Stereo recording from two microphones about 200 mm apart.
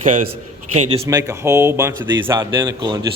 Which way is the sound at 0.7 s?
35° right (ahead or behind).